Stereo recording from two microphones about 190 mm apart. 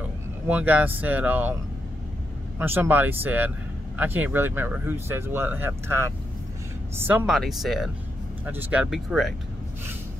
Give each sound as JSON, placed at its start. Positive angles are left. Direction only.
{"t": 0.5, "sound": "speech", "side_deg": -10}
{"t": 2.6, "sound": "speech", "side_deg": -10}
{"t": 7.0, "sound": "speech", "side_deg": -10}